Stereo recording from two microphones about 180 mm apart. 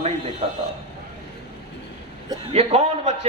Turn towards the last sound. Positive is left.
turn(degrees=-35)  # may be behind; listen again after turning